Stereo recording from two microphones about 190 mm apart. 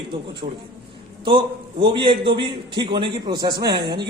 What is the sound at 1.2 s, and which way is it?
A man's voice, 25° right (ahead or behind).